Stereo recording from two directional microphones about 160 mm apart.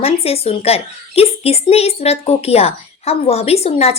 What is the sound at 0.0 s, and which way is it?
A woman's voice, 40° left (ahead or behind).